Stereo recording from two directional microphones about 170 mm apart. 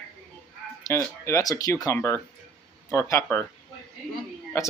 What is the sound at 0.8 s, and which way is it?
Speech, 20° left (ahead or behind).